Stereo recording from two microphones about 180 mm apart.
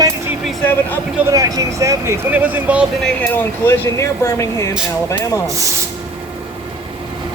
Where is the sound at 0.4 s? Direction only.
5° left (ahead or behind).